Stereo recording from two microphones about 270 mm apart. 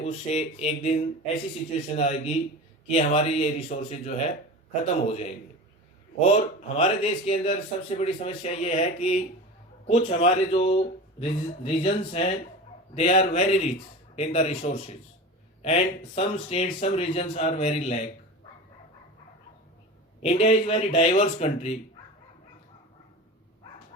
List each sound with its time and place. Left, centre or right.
0.0 s a man's voice: left
20.2 s a man's voice: left